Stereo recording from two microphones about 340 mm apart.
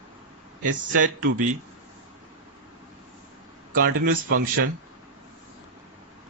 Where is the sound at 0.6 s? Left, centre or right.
Right.